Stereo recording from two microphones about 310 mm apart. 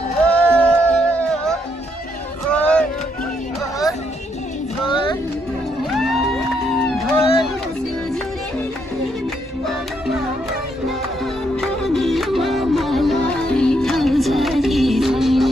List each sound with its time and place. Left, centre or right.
0.3 s music: centre
2.5 s a sound: centre
4.8 s music: centre
5.9 s music: centre
6.9 s a sound: centre
11.5 s music: centre